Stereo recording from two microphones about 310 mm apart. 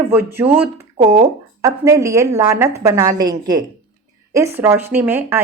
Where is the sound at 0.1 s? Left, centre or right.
Centre.